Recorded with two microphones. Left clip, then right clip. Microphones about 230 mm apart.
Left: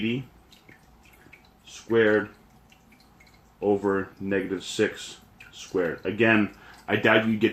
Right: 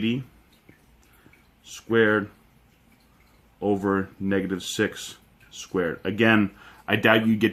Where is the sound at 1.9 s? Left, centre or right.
Right.